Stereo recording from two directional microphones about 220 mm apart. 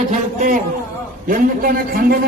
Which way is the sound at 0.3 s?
35° right (ahead or behind).